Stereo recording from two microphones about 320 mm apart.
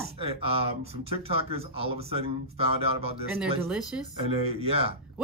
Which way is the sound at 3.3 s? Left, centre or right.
Centre.